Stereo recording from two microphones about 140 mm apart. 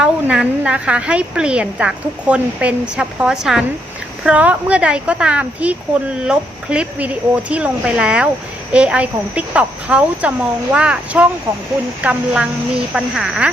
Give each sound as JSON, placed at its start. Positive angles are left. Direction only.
{"t": 0.0, "sound": "a woman's voice", "side_deg": -5}